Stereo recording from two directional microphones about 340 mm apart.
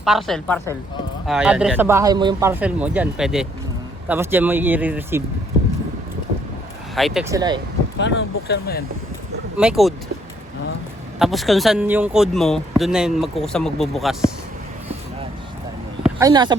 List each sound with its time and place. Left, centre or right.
0.0 s speech: centre
6.9 s speech: centre
7.9 s speech: left
9.6 s speech: centre
11.2 s speech: centre
16.0 s speech: centre